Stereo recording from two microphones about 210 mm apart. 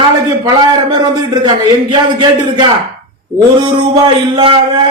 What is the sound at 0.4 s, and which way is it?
A man's voice, 20° right (ahead or behind).